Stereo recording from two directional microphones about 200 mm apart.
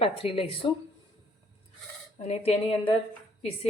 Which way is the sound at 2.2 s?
30° left (ahead or behind).